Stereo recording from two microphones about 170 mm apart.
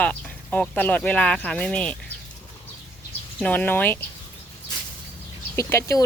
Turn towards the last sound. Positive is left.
turn(degrees=20)  # may be behind; listen again after turning